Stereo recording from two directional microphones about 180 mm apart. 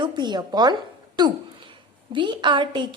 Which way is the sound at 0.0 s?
25° right (ahead or behind).